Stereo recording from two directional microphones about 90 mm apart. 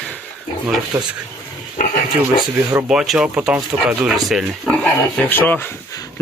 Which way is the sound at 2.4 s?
45° right (ahead or behind).